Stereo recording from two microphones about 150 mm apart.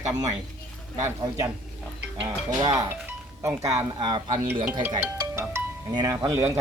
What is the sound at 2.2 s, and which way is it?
Speech, 25° right (ahead or behind).